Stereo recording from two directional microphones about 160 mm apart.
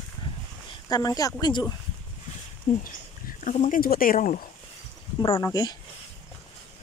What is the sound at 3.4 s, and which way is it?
Speech, 55° left (ahead or behind).